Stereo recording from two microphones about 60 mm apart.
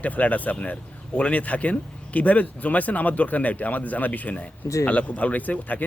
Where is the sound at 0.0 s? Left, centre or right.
Left.